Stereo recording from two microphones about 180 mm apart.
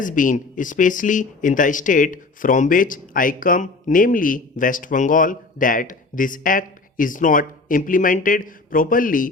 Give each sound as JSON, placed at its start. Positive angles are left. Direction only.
{"t": 0.0, "sound": "speech", "side_deg": 45}